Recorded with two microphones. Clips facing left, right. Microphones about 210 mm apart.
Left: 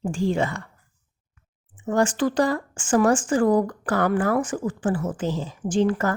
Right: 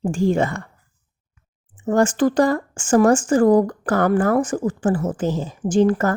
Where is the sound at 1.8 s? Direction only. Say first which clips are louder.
Right 4 dB; 45° right (ahead or behind).